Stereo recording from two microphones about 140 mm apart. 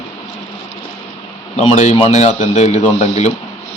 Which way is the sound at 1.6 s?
50° left (ahead or behind).